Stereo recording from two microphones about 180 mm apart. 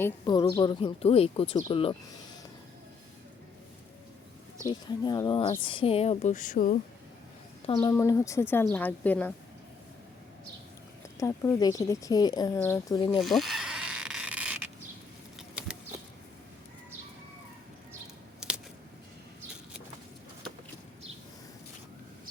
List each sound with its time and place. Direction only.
0.3 s speech: 25° left (ahead or behind)
4.7 s speech: 25° left (ahead or behind); by 6.7 s 50° left (ahead or behind)
7.8 s a woman's voice: 15° left (ahead or behind)
11.2 s a woman's voice: 20° left (ahead or behind)
13.1 s a sound: centre (ahead or behind)